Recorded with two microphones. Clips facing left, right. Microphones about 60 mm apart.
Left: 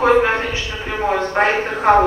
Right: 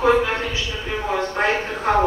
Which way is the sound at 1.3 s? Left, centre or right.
Left.